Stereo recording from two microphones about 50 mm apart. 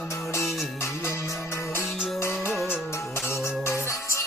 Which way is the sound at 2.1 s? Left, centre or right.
Left.